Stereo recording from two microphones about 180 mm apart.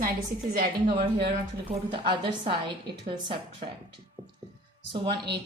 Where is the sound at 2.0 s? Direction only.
25° right (ahead or behind).